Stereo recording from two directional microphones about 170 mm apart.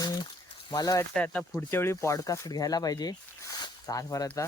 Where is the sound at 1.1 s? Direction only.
5° left (ahead or behind).